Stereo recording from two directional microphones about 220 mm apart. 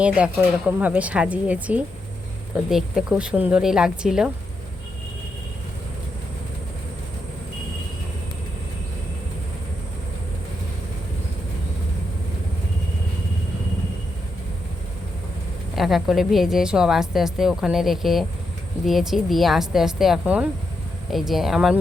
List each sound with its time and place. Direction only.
0.0 s a woman's voice: 5° right (ahead or behind)
15.7 s a woman's voice: centre (ahead or behind)